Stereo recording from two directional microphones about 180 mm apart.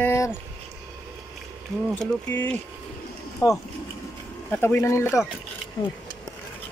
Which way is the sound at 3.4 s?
20° left (ahead or behind).